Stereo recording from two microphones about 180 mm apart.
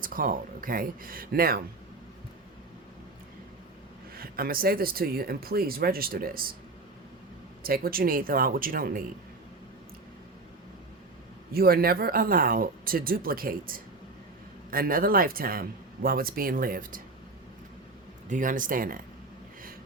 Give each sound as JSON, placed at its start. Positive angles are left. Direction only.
{"t": 0.0, "sound": "speech", "side_deg": -50}
{"t": 4.1, "sound": "speech", "side_deg": -55}
{"t": 7.6, "sound": "speech", "side_deg": -55}
{"t": 11.5, "sound": "speech", "side_deg": -55}
{"t": 18.3, "sound": "speech", "side_deg": -45}